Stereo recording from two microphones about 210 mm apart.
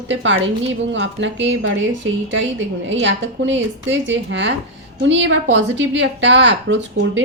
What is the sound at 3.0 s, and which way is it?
A woman's voice, 60° right (ahead or behind).